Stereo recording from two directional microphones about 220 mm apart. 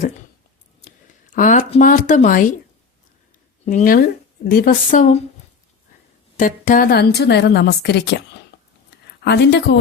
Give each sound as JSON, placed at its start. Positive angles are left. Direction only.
{"t": 0.8, "sound": "speech", "side_deg": 35}
{"t": 3.7, "sound": "a woman's voice", "side_deg": 40}
{"t": 6.3, "sound": "a woman's voice", "side_deg": 40}